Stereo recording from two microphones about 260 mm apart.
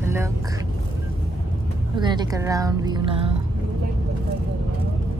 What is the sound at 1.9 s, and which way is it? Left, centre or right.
Speech, centre.